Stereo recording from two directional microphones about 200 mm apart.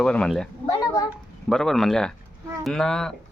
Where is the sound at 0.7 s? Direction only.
20° left (ahead or behind).